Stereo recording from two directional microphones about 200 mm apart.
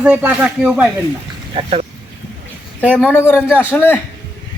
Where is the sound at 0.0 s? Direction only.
5° right (ahead or behind).